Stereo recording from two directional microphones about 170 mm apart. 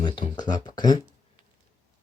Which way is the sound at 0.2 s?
25° left (ahead or behind).